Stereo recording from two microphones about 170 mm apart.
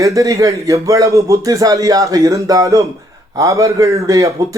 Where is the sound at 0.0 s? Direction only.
20° right (ahead or behind).